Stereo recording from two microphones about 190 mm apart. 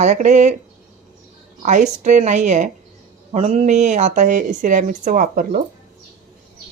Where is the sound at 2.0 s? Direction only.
40° right (ahead or behind).